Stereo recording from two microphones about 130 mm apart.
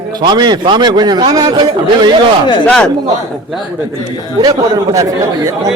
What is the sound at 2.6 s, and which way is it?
Speech, 5° left (ahead or behind).